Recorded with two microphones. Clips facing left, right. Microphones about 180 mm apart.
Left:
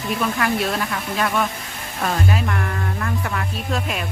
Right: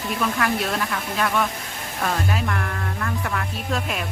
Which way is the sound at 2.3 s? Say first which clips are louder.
Left 2 dB; 5° left (ahead or behind).